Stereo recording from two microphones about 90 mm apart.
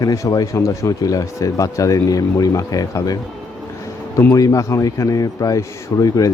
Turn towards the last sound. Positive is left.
turn(degrees=45)  # may be behind; listen again after turning